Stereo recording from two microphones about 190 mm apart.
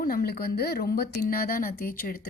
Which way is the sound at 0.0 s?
50° left (ahead or behind).